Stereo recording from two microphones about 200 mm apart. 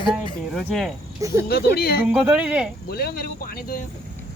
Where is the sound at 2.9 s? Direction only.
50° left (ahead or behind).